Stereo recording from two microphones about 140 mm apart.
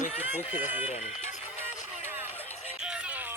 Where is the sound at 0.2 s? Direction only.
15° right (ahead or behind).